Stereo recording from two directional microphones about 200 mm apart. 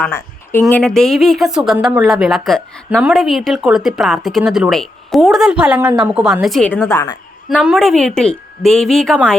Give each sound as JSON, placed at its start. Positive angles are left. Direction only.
{"t": 0.0, "sound": "a sound", "side_deg": 10}
{"t": 0.6, "sound": "a woman's voice", "side_deg": 5}
{"t": 6.9, "sound": "a woman's voice", "side_deg": 20}
{"t": 7.5, "sound": "a woman's voice", "side_deg": 0}